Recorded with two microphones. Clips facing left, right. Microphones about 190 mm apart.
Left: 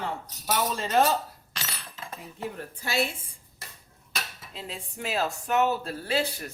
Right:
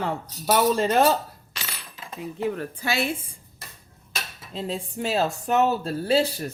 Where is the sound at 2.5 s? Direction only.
90° right.